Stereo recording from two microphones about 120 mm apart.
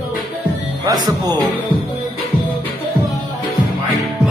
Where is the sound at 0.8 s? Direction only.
35° right (ahead or behind).